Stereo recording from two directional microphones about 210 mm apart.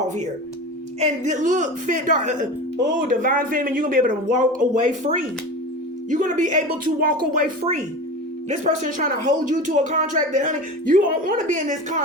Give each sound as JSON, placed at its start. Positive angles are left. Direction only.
{"t": 0.9, "sound": "speech", "side_deg": -35}